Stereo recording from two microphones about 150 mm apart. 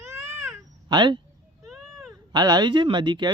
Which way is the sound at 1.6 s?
Centre (ahead or behind).